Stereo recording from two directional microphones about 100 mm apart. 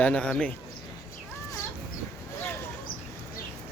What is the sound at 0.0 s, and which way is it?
Speech, 10° left (ahead or behind).